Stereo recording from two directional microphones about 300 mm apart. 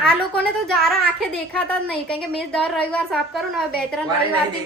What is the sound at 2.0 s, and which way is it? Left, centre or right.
A woman's voice, centre.